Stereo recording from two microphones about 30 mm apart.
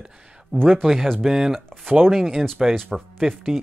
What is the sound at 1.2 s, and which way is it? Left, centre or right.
Speech, centre.